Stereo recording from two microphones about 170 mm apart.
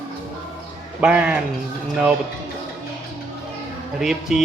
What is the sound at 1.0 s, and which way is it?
Speech, 5° right (ahead or behind).